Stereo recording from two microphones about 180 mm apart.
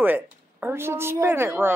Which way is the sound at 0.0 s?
10° right (ahead or behind).